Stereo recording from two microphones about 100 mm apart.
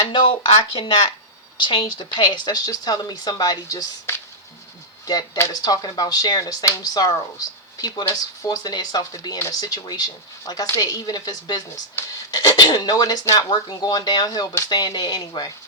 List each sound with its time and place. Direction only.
0.1 s a woman's voice: 55° left (ahead or behind)